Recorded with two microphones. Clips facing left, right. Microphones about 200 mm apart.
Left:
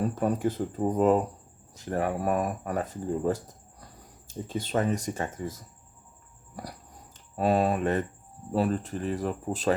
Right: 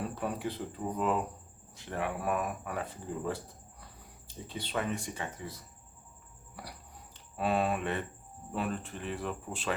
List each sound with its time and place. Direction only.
0.0 s speech: 45° left (ahead or behind)
7.3 s speech: 40° left (ahead or behind)